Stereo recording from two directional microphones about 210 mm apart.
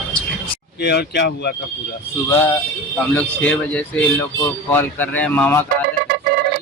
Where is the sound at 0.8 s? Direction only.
50° left (ahead or behind).